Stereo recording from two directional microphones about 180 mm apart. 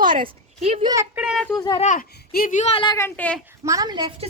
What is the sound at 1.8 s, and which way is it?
Speech, 50° left (ahead or behind).